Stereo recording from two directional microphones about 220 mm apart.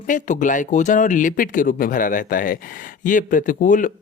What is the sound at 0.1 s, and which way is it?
Speech, 35° left (ahead or behind).